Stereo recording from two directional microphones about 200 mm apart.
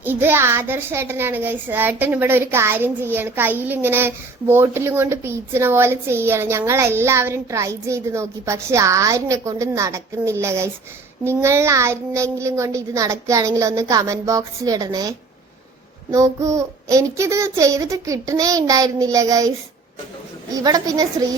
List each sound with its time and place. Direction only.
0.0 s a child's voice: 10° right (ahead or behind)
16.1 s a child's voice: 15° right (ahead or behind)